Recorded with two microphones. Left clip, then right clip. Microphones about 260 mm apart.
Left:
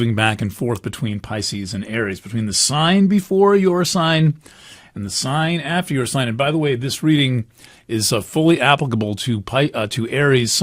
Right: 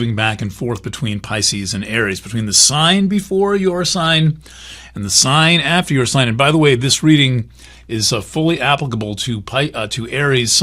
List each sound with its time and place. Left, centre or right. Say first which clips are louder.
0.0 s speech: even; left
4.9 s speech: right 8 dB; centre
7.0 s speech: right 4 dB; centre
7.9 s speech: right 2 dB; left